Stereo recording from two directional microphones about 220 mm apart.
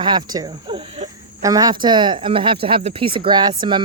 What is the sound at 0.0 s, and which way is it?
A woman's voice, 20° right (ahead or behind).